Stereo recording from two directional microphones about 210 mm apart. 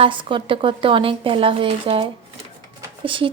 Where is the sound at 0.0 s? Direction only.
25° right (ahead or behind).